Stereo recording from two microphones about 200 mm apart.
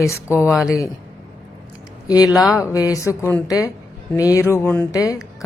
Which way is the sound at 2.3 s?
Centre (ahead or behind).